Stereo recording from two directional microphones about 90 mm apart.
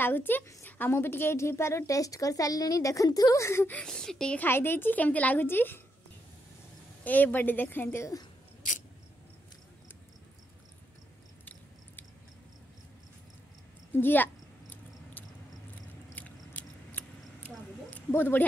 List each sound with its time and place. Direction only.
0.0 s a woman's voice: 25° left (ahead or behind)
3.7 s speech: 5° left (ahead or behind)
4.4 s a woman's voice: 25° left (ahead or behind)
7.1 s a woman's voice: 20° left (ahead or behind)
13.9 s cricket: 20° left (ahead or behind)
16.2 s chewing: 15° left (ahead or behind)